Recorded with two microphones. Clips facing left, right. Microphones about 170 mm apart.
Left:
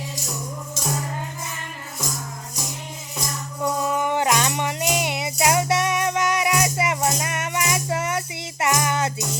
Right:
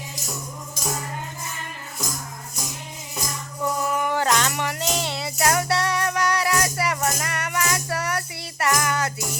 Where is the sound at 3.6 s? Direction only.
20° left (ahead or behind).